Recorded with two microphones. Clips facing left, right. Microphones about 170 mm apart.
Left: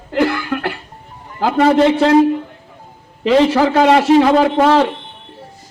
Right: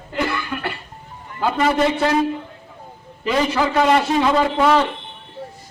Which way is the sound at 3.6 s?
70° left (ahead or behind).